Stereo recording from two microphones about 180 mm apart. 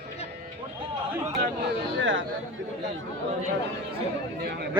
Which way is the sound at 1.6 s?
90° right.